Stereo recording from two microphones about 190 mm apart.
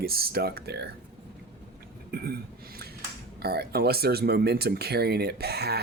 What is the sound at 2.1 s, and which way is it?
Speech, 55° right (ahead or behind).